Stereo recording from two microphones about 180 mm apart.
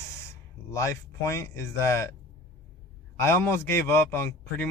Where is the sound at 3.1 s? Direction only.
15° left (ahead or behind).